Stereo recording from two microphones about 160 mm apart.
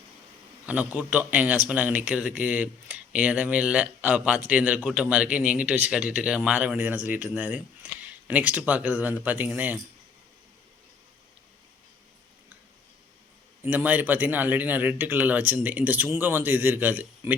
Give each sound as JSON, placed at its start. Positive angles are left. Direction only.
{"t": 0.6, "sound": "a man's voice", "side_deg": -10}
{"t": 13.6, "sound": "a man's voice", "side_deg": -10}